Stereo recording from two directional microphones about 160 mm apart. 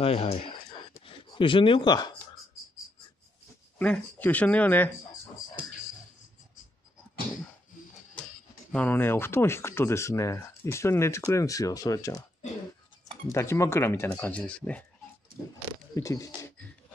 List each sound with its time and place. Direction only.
0.0 s speech: 40° left (ahead or behind)
3.7 s speech: 10° left (ahead or behind)
8.7 s speech: 10° left (ahead or behind)
13.3 s speech: 20° left (ahead or behind)
15.9 s speech: 20° left (ahead or behind)